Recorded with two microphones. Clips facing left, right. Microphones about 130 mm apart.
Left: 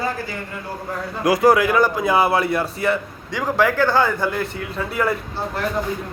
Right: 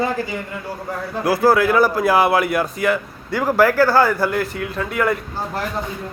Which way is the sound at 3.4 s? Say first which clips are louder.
Right 3 dB; 10° right (ahead or behind).